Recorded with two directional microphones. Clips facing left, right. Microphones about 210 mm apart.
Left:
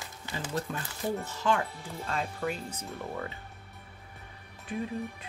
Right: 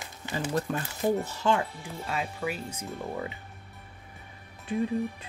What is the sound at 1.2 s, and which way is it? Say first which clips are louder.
Speech: right 2 dB; 30° right (ahead or behind).